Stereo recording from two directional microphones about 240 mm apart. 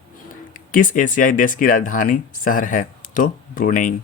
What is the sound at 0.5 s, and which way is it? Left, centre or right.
Speech, left.